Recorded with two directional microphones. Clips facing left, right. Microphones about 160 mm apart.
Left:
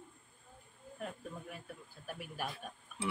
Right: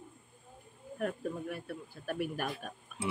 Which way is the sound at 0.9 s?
70° right (ahead or behind).